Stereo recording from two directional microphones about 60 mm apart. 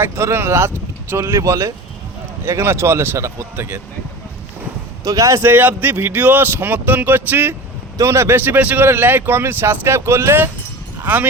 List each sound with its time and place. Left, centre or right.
0.0 s speech: right
5.0 s speech: right
5.4 s speech: right
7.9 s speech: right
11.0 s speech: right